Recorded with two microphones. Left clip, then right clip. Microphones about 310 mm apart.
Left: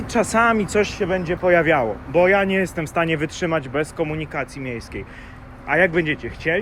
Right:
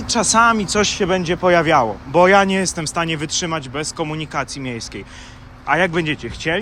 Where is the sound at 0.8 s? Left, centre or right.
Right.